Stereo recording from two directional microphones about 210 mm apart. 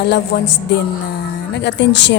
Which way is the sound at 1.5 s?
55° left (ahead or behind).